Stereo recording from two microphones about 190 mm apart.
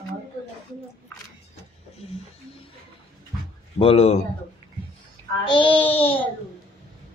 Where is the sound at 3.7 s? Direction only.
30° left (ahead or behind).